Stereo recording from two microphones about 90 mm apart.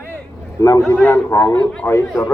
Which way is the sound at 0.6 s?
35° left (ahead or behind).